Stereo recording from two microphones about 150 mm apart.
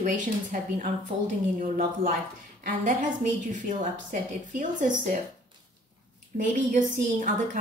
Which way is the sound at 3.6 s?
55° right (ahead or behind).